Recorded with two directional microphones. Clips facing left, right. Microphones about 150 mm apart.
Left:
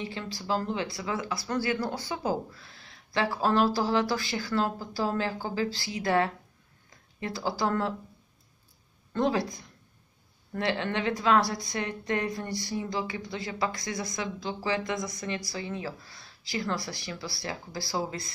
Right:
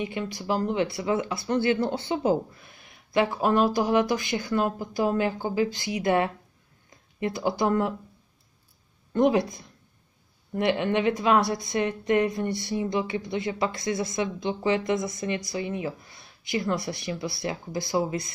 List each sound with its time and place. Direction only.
0.0 s a woman's voice: 20° right (ahead or behind)
9.1 s a woman's voice: 20° right (ahead or behind)